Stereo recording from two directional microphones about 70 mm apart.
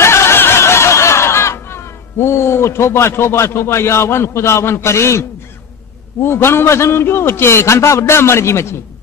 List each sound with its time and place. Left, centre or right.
0.0 s snicker: left
6.2 s a man's voice: left